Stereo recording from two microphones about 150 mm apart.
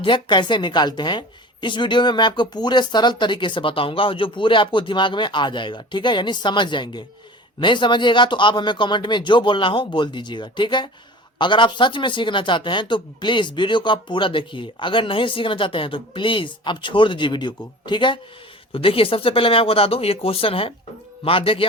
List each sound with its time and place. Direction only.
0.0 s a woman's voice: 30° left (ahead or behind)